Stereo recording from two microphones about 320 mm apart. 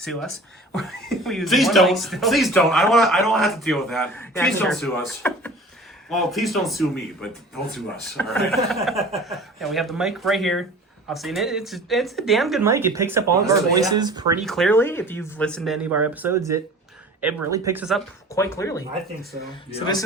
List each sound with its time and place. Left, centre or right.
0.0 s speech: centre
14.4 s speech: centre